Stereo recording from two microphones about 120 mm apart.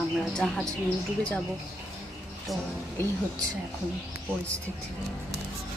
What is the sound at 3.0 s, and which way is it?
Speech, 20° left (ahead or behind).